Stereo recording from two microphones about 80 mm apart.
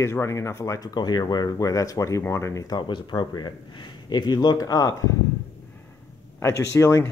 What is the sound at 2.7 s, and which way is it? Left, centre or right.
Speech, left.